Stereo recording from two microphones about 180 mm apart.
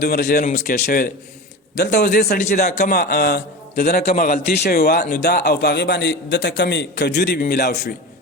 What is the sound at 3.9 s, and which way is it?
A man's voice, 50° left (ahead or behind).